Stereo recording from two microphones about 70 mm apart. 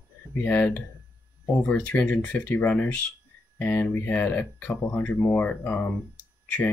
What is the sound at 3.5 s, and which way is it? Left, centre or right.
Speech, left.